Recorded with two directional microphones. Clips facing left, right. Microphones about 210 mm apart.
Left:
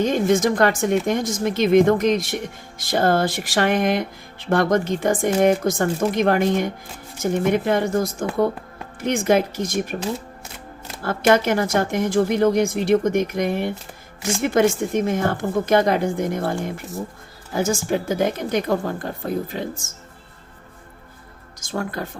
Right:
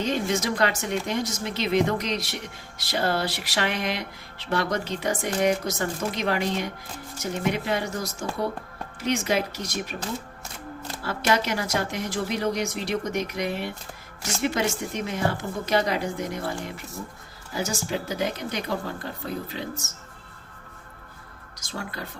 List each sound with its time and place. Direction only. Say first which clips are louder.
0.0 s speech: left 8 dB; 50° left (ahead or behind)
11.0 s speech: left 8 dB; 50° left (ahead or behind)
21.6 s speech: left 8 dB; 50° left (ahead or behind)